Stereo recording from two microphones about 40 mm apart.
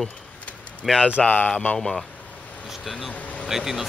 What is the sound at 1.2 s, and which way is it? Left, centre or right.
Speech, left.